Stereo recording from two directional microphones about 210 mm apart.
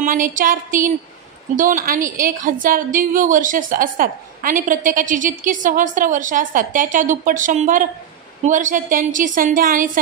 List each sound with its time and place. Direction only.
0.0 s a woman's voice: 40° right (ahead or behind)